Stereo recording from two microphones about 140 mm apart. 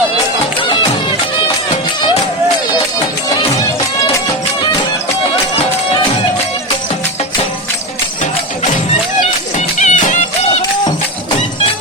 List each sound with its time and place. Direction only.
9.6 s music: 60° left (ahead or behind)